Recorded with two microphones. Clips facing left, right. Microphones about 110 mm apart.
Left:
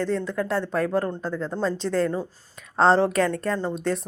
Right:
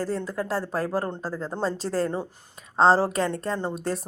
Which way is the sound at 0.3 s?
35° right (ahead or behind).